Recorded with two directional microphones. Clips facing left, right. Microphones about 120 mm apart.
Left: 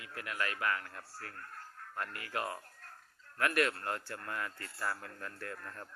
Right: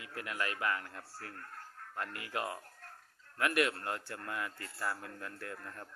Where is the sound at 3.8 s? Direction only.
15° right (ahead or behind).